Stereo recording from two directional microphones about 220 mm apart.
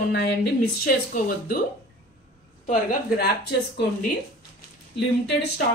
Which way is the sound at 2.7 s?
40° left (ahead or behind).